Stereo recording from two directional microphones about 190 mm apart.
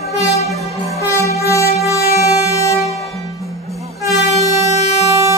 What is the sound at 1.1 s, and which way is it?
Music, 15° left (ahead or behind).